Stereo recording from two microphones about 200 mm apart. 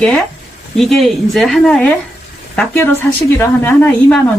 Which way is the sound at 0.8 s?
Centre (ahead or behind).